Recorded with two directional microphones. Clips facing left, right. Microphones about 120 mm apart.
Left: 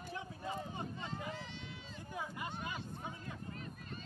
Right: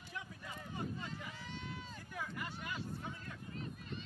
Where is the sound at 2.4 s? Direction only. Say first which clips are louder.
Left 1 dB; 20° left (ahead or behind).